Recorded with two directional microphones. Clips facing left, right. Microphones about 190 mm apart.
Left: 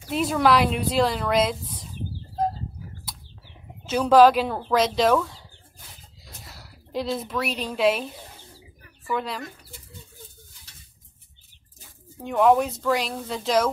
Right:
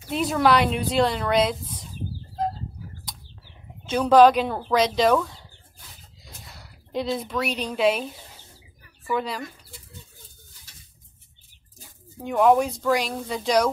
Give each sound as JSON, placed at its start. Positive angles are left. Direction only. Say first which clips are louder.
{"t": 0.1, "sound": "speech", "louder": "even", "side_deg": 0}
{"t": 3.1, "sound": "bird", "louder": "even", "side_deg": 5}
{"t": 4.0, "sound": "a woman's voice", "louder": "even", "side_deg": 0}
{"t": 12.2, "sound": "speech", "louder": "even", "side_deg": 0}